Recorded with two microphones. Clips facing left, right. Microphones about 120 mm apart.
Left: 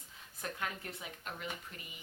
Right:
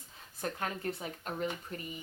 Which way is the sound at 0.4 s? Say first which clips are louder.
Right 6 dB; 35° right (ahead or behind).